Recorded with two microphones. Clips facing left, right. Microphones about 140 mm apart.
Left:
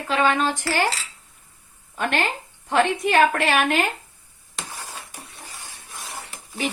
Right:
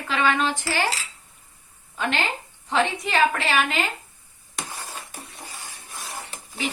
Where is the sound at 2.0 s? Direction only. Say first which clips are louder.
Left 2 dB; 50° left (ahead or behind).